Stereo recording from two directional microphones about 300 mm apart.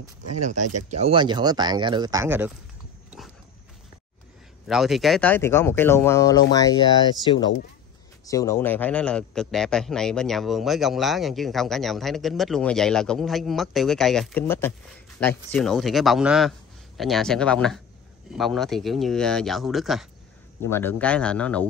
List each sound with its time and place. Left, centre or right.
0.3 s speech: right
0.6 s speech: right
0.9 s speech: centre
3.2 s dog: centre
4.6 s a man's voice: centre